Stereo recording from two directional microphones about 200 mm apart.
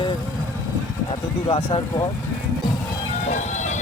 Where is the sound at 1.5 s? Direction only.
25° left (ahead or behind).